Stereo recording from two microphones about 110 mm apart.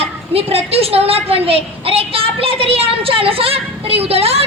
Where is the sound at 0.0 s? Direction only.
65° right (ahead or behind).